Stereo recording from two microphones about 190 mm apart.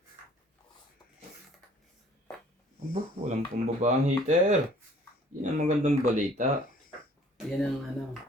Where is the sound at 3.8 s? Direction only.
40° right (ahead or behind).